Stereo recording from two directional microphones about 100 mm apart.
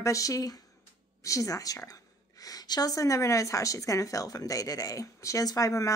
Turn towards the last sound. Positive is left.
turn(degrees=35)  # may be behind; listen again after turning